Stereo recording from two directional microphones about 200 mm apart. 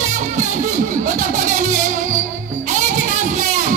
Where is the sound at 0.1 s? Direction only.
40° right (ahead or behind).